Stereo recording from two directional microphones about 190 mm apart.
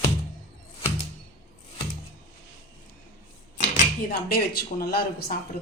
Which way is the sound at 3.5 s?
40° left (ahead or behind).